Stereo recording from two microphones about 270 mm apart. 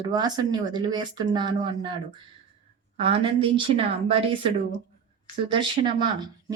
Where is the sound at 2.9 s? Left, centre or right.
Centre.